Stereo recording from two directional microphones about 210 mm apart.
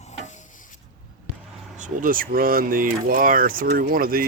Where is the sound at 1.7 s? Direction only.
40° right (ahead or behind).